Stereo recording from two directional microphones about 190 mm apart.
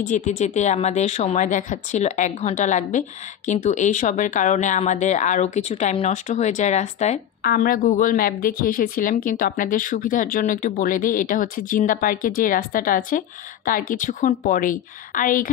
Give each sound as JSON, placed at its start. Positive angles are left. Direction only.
{"t": 0.0, "sound": "speech", "side_deg": 40}
{"t": 7.4, "sound": "speech", "side_deg": 50}